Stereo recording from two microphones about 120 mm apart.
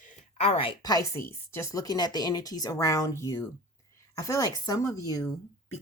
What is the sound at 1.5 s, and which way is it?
Speech, 25° left (ahead or behind).